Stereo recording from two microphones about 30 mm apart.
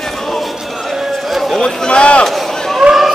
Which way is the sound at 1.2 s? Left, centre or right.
Centre.